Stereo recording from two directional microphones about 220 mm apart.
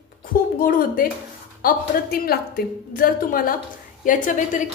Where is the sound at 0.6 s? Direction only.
40° left (ahead or behind).